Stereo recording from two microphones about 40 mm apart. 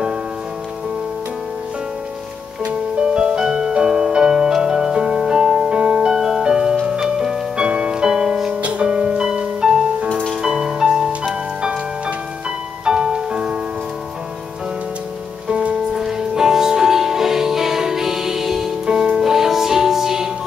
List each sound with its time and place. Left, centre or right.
3.0 s music: right
6.1 s music: centre
12.8 s music: centre
15.4 s music: right
15.9 s music: centre
18.9 s music: right